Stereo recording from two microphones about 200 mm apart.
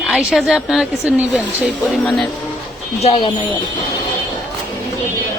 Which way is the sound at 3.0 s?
30° left (ahead or behind).